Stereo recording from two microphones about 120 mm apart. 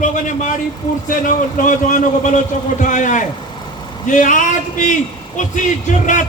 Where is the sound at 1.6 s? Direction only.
90° left.